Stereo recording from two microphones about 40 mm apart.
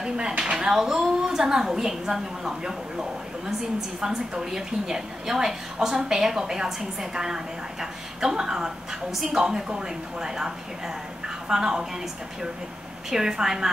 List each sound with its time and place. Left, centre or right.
0.3 s a woman's voice: right
13.1 s a woman's voice: centre